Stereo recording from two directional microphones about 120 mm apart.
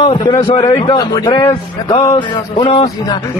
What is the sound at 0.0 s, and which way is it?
A man's voice, 40° left (ahead or behind).